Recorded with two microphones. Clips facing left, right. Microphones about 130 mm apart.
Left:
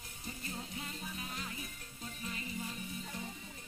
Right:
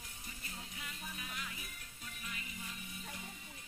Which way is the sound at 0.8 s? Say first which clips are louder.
Left 4 dB; 35° left (ahead or behind).